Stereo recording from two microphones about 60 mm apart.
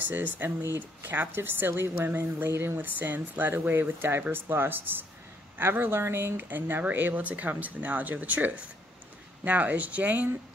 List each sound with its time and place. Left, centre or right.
0.1 s speech: right
2.8 s speech: right